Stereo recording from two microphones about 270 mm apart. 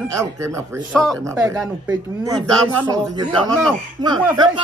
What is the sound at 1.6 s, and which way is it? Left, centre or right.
A man's voice, centre.